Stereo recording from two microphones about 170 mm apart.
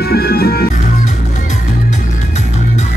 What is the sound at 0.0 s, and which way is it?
Music, 65° left (ahead or behind).